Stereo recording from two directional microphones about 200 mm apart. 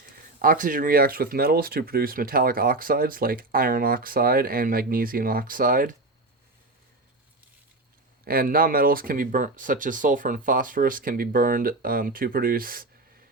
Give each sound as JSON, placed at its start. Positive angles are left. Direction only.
{"t": 0.4, "sound": "speech", "side_deg": -45}
{"t": 8.2, "sound": "speech", "side_deg": -45}